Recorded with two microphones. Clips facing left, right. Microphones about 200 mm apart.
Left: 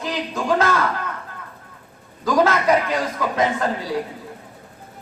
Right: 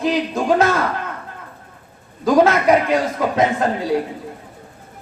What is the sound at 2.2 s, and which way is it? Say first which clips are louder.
Speech: right 4 dB; 25° right (ahead or behind).